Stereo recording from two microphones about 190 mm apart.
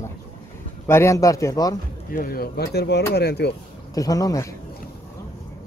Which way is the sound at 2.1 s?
50° left (ahead or behind).